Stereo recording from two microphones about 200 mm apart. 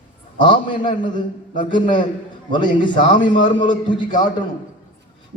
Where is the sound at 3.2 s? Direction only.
25° left (ahead or behind).